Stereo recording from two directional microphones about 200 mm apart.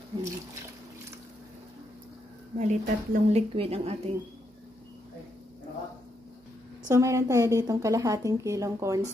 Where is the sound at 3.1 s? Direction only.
30° right (ahead or behind).